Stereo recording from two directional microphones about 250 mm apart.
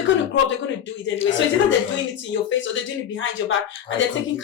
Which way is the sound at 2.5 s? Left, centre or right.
Left.